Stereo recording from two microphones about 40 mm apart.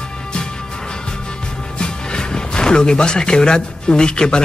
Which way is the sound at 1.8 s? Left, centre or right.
Left.